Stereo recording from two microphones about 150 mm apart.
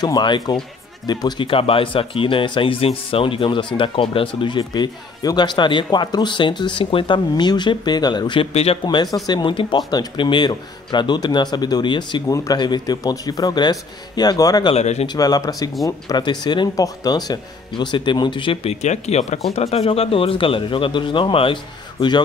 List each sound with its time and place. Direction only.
0.0 s speech: 30° left (ahead or behind)
8.8 s speech: 25° left (ahead or behind)
14.7 s speech: 45° left (ahead or behind)
15.0 s speech: 25° left (ahead or behind)